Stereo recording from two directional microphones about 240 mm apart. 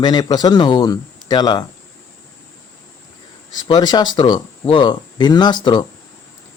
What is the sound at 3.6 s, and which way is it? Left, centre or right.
Speech, centre.